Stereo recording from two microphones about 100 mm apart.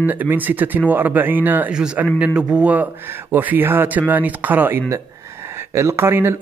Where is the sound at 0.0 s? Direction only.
15° right (ahead or behind).